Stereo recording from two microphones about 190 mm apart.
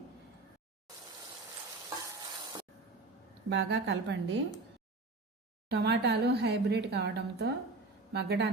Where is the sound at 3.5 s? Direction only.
65° right (ahead or behind).